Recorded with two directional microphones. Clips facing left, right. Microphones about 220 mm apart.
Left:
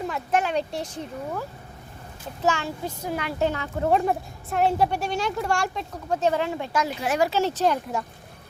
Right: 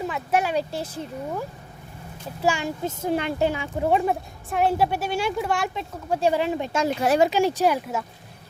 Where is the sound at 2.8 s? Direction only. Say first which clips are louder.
Right 6 dB; 25° right (ahead or behind).